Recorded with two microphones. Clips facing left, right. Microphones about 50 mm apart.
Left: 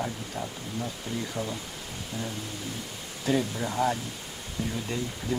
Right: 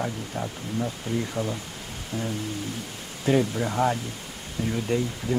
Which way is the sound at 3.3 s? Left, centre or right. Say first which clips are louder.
Right 4 dB; right.